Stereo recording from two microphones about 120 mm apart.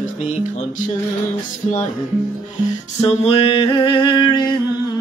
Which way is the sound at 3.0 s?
60° left (ahead or behind).